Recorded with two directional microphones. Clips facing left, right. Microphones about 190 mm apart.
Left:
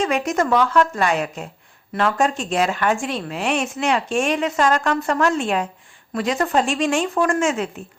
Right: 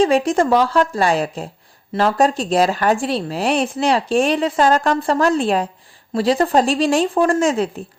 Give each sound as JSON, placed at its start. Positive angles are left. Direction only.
{"t": 0.0, "sound": "speech", "side_deg": -30}